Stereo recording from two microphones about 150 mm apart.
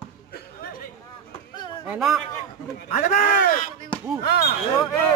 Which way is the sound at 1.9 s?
Centre (ahead or behind).